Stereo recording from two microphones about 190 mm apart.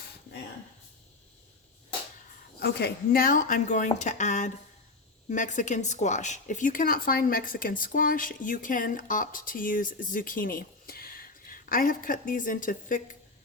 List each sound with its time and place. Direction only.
2.6 s a woman's voice: 55° left (ahead or behind)